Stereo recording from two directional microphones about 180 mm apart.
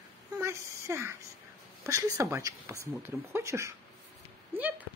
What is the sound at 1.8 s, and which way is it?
Speech, 20° right (ahead or behind).